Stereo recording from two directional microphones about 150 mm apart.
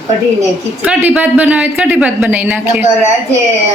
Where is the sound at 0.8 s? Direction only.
10° right (ahead or behind).